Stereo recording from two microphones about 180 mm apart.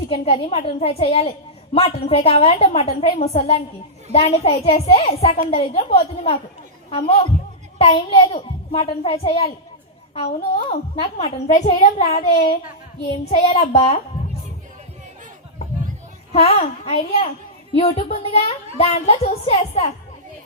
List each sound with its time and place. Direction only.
0.1 s a woman's voice: 35° left (ahead or behind)
16.3 s a woman's voice: 35° left (ahead or behind)